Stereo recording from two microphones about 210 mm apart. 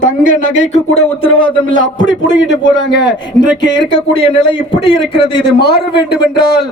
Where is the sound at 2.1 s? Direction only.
60° left (ahead or behind).